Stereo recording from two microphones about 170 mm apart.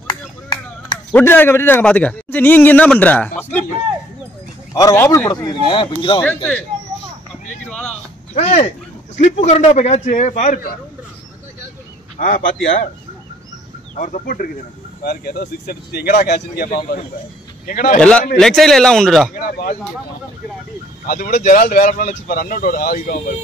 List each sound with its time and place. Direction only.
0.0 s chop: 25° left (ahead or behind)
1.1 s a man's voice: 10° left (ahead or behind)
4.7 s speech: 20° left (ahead or behind)
6.2 s a man's voice: 10° left (ahead or behind)
8.4 s a man's voice: 40° left (ahead or behind)
12.2 s a man's voice: 50° left (ahead or behind)
13.9 s a man's voice: 50° left (ahead or behind)
15.0 s a man's voice: 70° left (ahead or behind); by 18.0 s 50° left (ahead or behind)
18.4 s speech: centre (ahead or behind)
19.3 s speech: 55° left (ahead or behind)
21.1 s speech: 55° left (ahead or behind)